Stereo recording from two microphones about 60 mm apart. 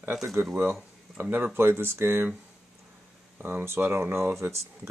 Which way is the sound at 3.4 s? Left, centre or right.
Right.